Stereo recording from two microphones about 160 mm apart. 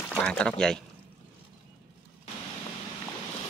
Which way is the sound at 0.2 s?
5° left (ahead or behind).